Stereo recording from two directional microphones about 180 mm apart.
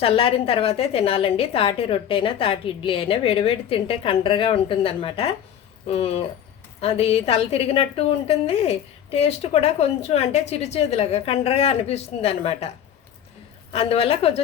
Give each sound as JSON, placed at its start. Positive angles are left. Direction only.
{"t": 0.0, "sound": "a woman's voice", "side_deg": 30}
{"t": 13.7, "sound": "a woman's voice", "side_deg": 35}